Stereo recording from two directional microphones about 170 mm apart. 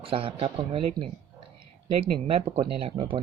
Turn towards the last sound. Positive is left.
turn(degrees=-30)  # may be behind; listen again after turning